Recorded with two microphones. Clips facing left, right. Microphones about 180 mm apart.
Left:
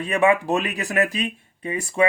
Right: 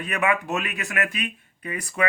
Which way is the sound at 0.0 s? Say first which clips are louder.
Left 6 dB; 30° left (ahead or behind).